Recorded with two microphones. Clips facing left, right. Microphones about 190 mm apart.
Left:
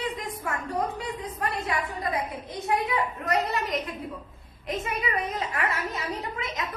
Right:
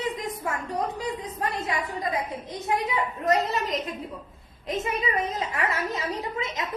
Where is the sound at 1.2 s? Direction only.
25° right (ahead or behind).